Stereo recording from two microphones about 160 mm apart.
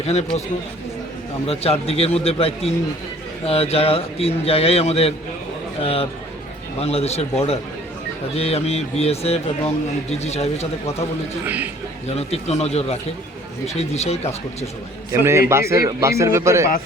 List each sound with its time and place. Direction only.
0.0 s a man's voice: 40° left (ahead or behind)
1.5 s a man's voice: 40° left (ahead or behind)
11.4 s a man's voice: 10° right (ahead or behind)
12.0 s a man's voice: 40° left (ahead or behind)
15.1 s a man's voice: 15° right (ahead or behind)